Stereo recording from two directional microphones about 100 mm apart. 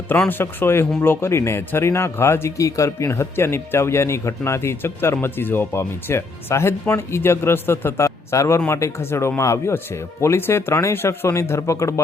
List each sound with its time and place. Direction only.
0.3 s speech: 20° left (ahead or behind)